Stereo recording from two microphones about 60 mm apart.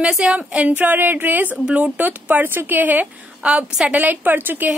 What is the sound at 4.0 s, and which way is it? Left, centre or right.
Speech, right.